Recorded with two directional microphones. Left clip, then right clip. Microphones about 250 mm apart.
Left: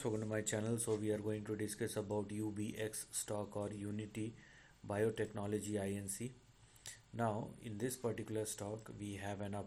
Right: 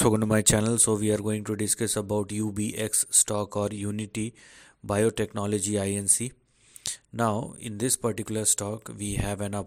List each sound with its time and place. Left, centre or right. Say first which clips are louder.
0.0 s speech: right 17 dB; right